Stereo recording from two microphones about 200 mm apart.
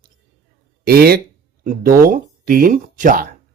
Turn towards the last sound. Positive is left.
turn(degrees=-40)  # may be behind; listen again after turning